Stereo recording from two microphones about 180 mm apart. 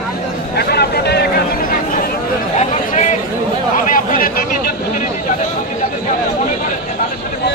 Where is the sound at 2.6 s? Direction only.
40° left (ahead or behind).